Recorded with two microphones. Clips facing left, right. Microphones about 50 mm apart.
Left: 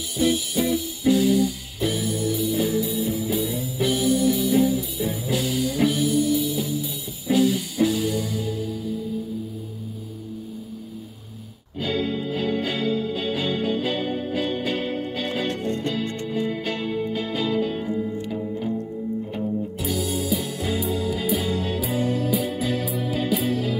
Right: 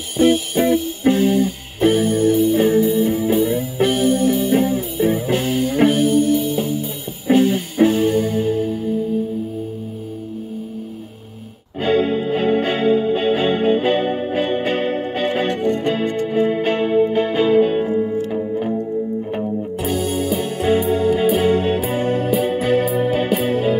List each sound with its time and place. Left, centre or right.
0.2 s music: right
11.8 s music: right